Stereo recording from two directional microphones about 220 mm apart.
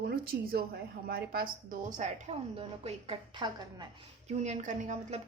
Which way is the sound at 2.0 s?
30° right (ahead or behind).